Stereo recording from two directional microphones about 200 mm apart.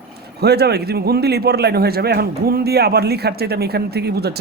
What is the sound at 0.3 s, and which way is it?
A man's voice, 55° right (ahead or behind).